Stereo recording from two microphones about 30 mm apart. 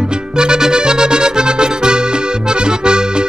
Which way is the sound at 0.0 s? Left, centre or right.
Right.